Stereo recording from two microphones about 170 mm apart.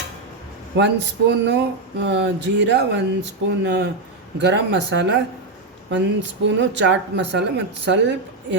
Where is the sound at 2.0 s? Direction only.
90° right.